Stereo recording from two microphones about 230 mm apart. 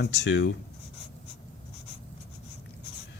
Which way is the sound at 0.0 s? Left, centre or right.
Left.